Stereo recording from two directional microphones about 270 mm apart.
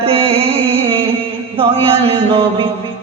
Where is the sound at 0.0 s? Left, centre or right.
Right.